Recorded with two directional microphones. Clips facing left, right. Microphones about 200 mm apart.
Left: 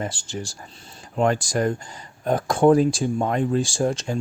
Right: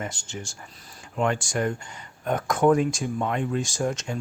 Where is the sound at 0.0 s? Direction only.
35° left (ahead or behind).